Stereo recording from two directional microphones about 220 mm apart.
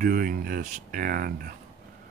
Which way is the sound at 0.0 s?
40° right (ahead or behind).